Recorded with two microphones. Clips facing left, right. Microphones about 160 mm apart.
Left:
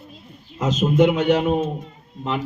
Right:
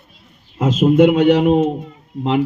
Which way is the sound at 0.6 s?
55° right (ahead or behind).